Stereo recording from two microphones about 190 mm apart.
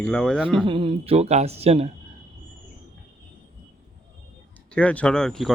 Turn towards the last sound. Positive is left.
turn(degrees=5)  # may be behind; listen again after turning